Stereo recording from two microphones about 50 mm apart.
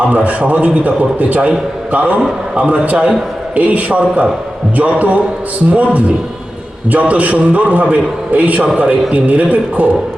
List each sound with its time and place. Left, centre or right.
0.1 s a man's voice: right